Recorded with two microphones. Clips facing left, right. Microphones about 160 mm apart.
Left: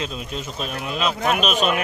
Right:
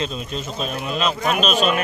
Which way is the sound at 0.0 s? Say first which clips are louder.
Right 2 dB; 10° left (ahead or behind).